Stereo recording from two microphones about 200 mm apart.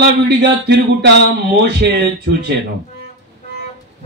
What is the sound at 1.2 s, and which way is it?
Speech, 55° right (ahead or behind).